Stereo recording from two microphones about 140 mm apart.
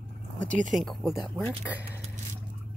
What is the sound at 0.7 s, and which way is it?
Speech, centre (ahead or behind).